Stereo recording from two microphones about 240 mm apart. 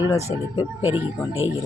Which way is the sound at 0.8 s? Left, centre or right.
Centre.